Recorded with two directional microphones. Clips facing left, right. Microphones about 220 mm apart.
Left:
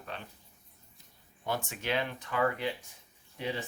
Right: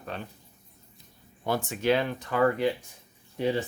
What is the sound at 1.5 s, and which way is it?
Speech, 35° right (ahead or behind).